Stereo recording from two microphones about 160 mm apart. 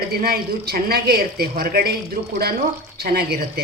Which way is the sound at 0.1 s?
75° right (ahead or behind).